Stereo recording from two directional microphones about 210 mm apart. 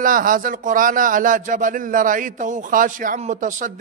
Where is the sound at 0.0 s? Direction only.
40° right (ahead or behind).